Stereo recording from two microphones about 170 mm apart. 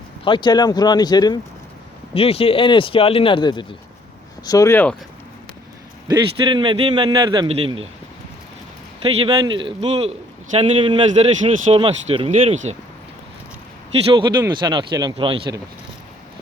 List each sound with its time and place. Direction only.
0.3 s speech: 25° left (ahead or behind)
2.1 s speech: 35° left (ahead or behind); by 4.9 s 10° left (ahead or behind)
6.1 s a man's voice: 25° right (ahead or behind)
9.0 s speech: 30° right (ahead or behind)
14.1 s a man's voice: 25° right (ahead or behind)